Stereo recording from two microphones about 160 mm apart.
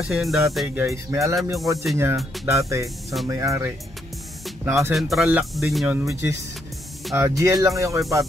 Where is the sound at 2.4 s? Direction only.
20° right (ahead or behind).